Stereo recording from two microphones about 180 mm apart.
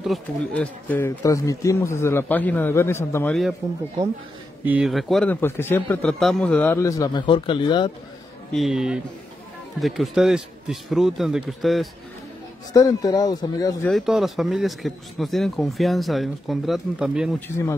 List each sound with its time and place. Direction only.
0.0 s speech: 5° left (ahead or behind)
4.6 s speech: 5° right (ahead or behind); by 7.9 s 25° left (ahead or behind)
8.5 s speech: centre (ahead or behind)
12.7 s speech: 20° left (ahead or behind)
13.8 s speech: centre (ahead or behind)